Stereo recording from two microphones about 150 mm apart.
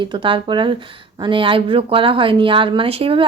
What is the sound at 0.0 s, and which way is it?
A woman's voice, 35° right (ahead or behind).